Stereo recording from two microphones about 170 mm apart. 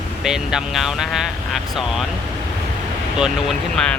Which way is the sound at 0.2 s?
5° right (ahead or behind).